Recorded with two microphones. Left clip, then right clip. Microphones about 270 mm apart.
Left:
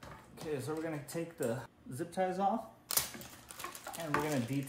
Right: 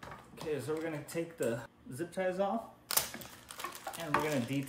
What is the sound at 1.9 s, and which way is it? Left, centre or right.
Speech, centre.